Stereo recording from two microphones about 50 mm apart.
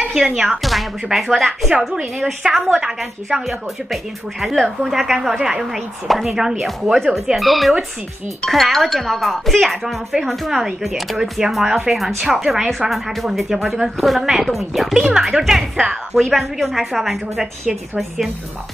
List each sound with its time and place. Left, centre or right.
0.1 s speech: centre
1.7 s a woman's voice: centre
16.2 s a woman's voice: centre